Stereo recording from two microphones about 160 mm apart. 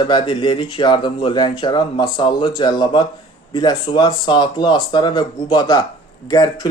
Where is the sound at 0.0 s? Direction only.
30° left (ahead or behind).